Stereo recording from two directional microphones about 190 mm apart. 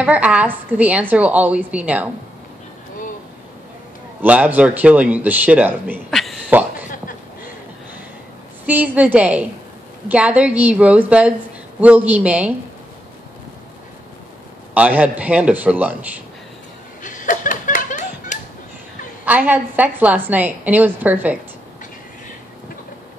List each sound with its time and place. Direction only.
0.0 s a woman's voice: 5° right (ahead or behind)
4.2 s a woman's voice: 10° right (ahead or behind)
6.0 s a sound: centre (ahead or behind)
8.6 s a woman's voice: 10° right (ahead or behind)
14.7 s a woman's voice: 10° right (ahead or behind)
17.0 s a sound: 45° left (ahead or behind)
19.2 s a woman's voice: 10° right (ahead or behind)